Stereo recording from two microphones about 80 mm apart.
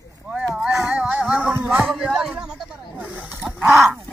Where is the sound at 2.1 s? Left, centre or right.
Centre.